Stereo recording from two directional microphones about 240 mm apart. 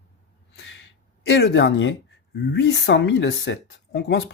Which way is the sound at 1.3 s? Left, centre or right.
Left.